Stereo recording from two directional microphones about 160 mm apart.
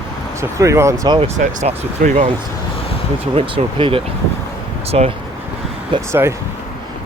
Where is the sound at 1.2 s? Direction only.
45° right (ahead or behind).